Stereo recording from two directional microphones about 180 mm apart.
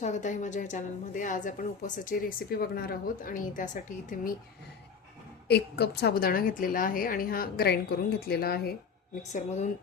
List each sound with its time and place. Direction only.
0.0 s a woman's voice: 40° left (ahead or behind)
5.5 s a woman's voice: 65° left (ahead or behind)
9.3 s speech: 40° left (ahead or behind)